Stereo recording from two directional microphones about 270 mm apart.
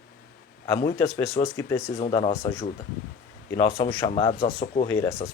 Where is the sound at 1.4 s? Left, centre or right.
Left.